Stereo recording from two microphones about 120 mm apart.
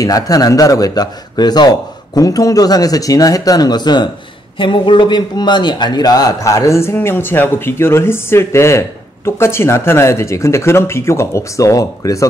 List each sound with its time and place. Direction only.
0.0 s a man's voice: 30° left (ahead or behind)